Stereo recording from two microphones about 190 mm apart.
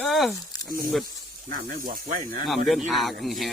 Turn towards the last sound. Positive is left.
turn(degrees=0)  # may be behind; listen again after turning